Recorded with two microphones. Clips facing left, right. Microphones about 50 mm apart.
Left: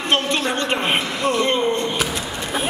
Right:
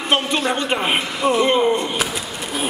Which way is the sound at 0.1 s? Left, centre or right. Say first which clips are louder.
Right 1 dB; centre.